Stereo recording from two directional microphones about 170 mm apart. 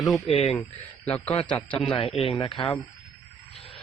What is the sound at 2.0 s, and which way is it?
Speech, 35° left (ahead or behind).